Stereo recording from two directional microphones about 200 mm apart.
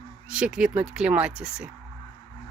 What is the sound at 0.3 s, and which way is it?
Speech, 5° right (ahead or behind).